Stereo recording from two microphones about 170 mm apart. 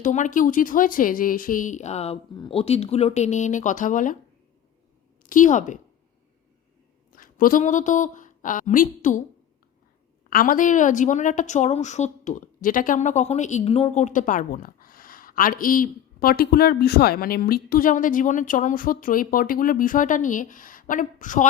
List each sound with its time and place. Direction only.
0.0 s a woman's voice: 50° left (ahead or behind)
5.2 s a woman's voice: 50° left (ahead or behind)
7.2 s speech: 55° left (ahead or behind)
10.2 s a woman's voice: 55° left (ahead or behind)